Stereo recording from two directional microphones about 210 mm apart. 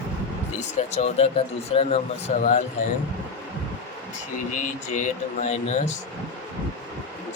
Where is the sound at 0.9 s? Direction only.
30° left (ahead or behind).